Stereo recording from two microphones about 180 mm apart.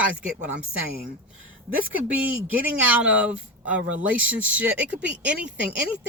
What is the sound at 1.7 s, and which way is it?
Speech, 10° right (ahead or behind).